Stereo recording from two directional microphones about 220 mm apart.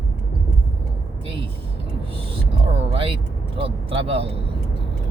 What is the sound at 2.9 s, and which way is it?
Vehicle, 25° right (ahead or behind).